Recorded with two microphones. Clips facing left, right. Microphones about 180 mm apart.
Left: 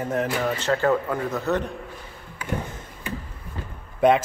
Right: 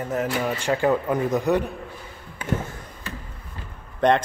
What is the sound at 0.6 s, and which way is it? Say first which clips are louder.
Speech: right 1 dB; 15° right (ahead or behind).